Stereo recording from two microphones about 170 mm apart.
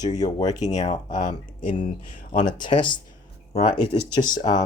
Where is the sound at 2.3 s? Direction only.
25° left (ahead or behind).